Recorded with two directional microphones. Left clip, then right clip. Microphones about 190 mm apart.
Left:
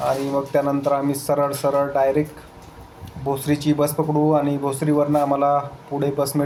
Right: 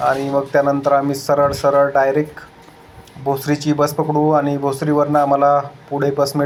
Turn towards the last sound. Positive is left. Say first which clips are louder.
# right 5 dB
turn(degrees=-5)  # may be behind; listen again after turning